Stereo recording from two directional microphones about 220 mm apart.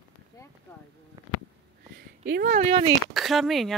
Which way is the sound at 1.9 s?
45° right (ahead or behind).